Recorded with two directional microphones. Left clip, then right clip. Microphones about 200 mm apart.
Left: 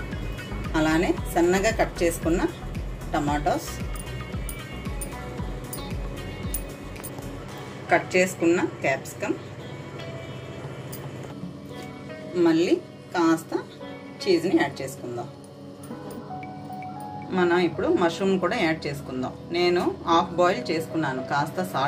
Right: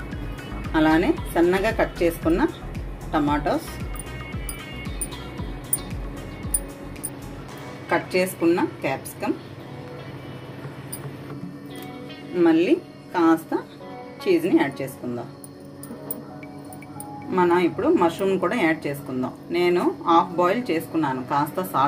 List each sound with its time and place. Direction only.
0.7 s a woman's voice: 35° right (ahead or behind)
7.9 s a woman's voice: 45° right (ahead or behind)
12.4 s a woman's voice: 35° right (ahead or behind)
17.3 s speech: 30° right (ahead or behind)